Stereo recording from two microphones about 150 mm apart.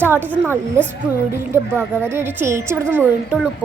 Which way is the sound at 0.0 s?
15° right (ahead or behind).